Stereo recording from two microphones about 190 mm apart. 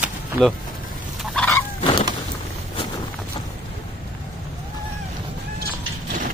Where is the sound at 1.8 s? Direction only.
30° left (ahead or behind).